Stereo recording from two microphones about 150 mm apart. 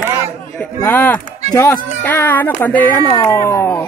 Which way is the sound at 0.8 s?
10° left (ahead or behind).